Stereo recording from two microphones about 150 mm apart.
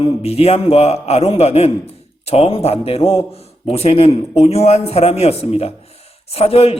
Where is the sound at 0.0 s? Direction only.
40° left (ahead or behind).